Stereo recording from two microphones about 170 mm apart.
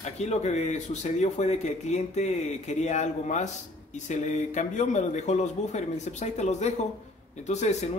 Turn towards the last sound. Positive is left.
turn(degrees=40)  # may be behind; listen again after turning